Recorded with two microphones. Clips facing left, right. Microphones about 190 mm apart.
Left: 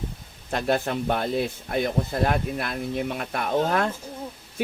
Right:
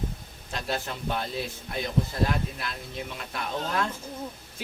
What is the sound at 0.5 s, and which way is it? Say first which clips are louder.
Speech: left 8 dB; 55° left (ahead or behind).